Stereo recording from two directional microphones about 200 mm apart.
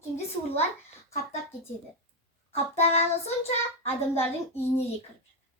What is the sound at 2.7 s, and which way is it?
Speech, 30° left (ahead or behind).